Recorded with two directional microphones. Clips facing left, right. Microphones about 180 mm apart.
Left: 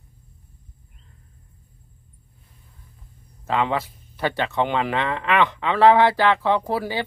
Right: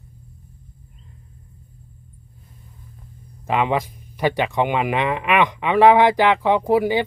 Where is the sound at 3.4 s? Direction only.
15° right (ahead or behind).